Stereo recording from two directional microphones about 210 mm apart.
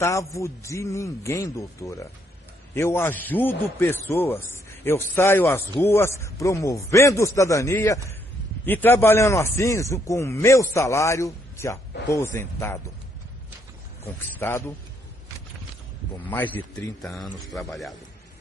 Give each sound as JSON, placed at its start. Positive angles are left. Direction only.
{"t": 0.0, "sound": "speech", "side_deg": 15}
{"t": 14.4, "sound": "speech", "side_deg": 10}
{"t": 16.3, "sound": "a man's voice", "side_deg": 10}